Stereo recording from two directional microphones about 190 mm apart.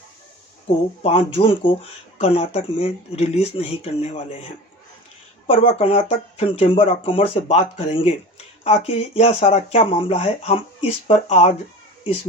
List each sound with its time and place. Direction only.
1.0 s speech: 30° left (ahead or behind)
5.5 s speech: 35° left (ahead or behind)